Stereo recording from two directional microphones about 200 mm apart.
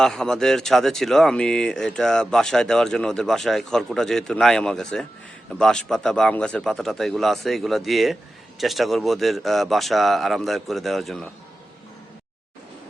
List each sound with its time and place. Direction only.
0.0 s speech: 5° left (ahead or behind)